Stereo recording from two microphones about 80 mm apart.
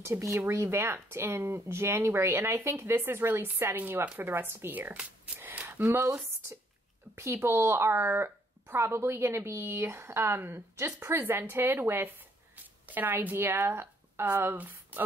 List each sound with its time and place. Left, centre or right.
0.0 s speech: right
4.9 s a sound: centre
5.9 s speech: right
7.2 s speech: right